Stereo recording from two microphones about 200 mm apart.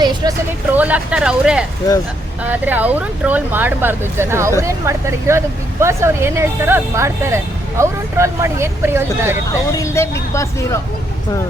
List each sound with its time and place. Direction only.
0.0 s a sound: 20° right (ahead or behind)
0.7 s speech: 5° right (ahead or behind)
9.5 s speech: 15° left (ahead or behind)